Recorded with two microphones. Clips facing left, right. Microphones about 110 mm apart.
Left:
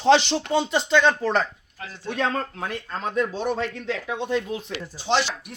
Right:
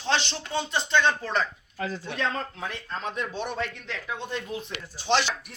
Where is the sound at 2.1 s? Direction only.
45° left (ahead or behind).